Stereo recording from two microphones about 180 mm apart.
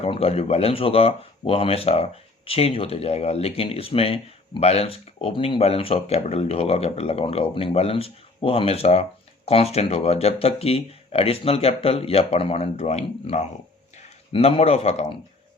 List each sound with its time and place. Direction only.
0.0 s speech: 35° left (ahead or behind)